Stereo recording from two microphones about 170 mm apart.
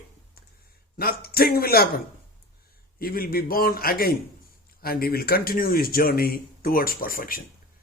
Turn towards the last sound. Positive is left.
turn(degrees=55)  # may be behind; listen again after turning